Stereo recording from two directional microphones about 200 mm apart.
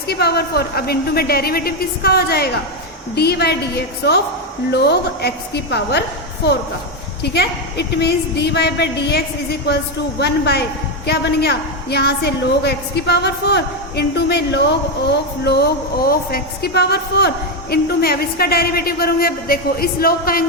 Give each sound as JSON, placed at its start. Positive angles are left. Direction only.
{"t": 0.1, "sound": "a woman's voice", "side_deg": 55}